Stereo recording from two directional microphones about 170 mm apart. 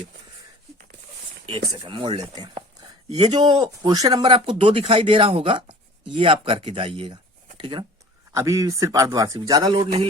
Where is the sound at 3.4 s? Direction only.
25° right (ahead or behind).